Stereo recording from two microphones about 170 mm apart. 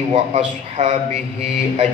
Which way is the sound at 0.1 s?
40° right (ahead or behind).